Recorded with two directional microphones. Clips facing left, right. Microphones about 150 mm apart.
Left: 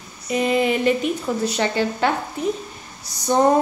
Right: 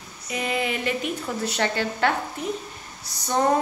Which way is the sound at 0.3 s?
25° left (ahead or behind).